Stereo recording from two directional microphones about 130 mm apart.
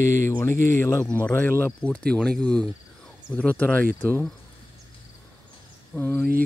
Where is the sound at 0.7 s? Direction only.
20° left (ahead or behind).